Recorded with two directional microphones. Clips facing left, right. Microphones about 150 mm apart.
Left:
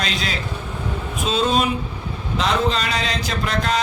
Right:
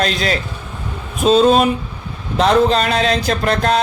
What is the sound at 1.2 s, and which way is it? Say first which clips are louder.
A man's voice: right 9 dB; 45° right (ahead or behind).